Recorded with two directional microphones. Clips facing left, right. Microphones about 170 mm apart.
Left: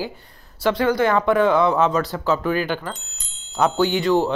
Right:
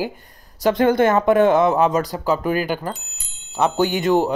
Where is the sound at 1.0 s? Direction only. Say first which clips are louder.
Right 2 dB; 20° right (ahead or behind).